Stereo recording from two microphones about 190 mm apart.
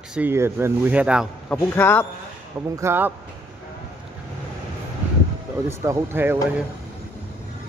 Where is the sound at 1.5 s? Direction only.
10° left (ahead or behind).